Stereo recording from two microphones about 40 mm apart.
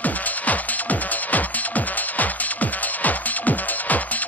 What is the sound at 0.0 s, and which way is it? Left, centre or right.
Music, left.